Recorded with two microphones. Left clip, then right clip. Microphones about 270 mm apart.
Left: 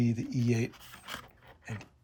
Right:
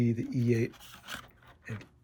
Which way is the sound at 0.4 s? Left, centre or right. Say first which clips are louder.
Right 3 dB; left.